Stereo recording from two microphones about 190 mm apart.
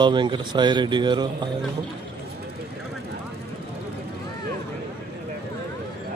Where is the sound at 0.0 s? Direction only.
25° right (ahead or behind).